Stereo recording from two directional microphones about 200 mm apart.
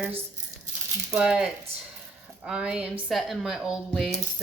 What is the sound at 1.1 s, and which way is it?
Speech, 5° right (ahead or behind).